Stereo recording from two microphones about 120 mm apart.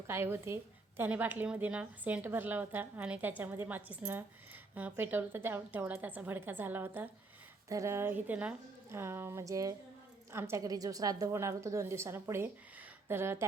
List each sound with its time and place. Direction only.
0.1 s a woman's voice: 20° right (ahead or behind)